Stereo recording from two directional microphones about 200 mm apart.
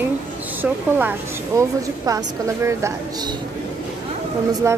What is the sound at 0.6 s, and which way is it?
Speech, 10° right (ahead or behind).